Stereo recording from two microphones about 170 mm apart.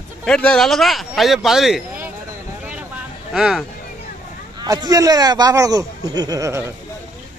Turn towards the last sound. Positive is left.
turn(degrees=-20)  # may be behind; listen again after turning